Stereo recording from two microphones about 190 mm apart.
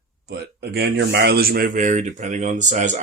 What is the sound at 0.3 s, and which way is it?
Speech, 60° right (ahead or behind).